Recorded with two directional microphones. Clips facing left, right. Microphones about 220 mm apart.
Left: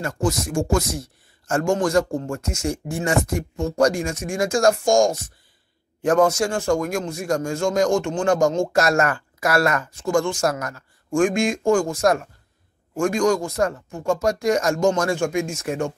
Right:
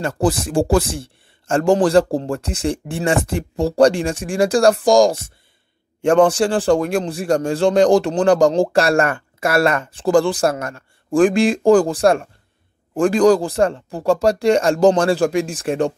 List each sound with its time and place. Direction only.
0.0 s a man's voice: 35° right (ahead or behind)